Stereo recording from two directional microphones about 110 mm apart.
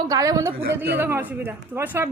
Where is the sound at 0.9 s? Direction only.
20° right (ahead or behind).